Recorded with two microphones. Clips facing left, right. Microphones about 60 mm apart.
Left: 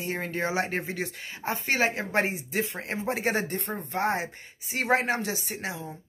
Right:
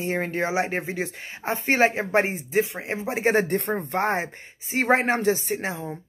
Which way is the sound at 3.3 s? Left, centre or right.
Right.